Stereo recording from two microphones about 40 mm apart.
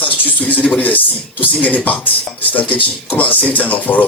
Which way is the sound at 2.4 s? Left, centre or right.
Left.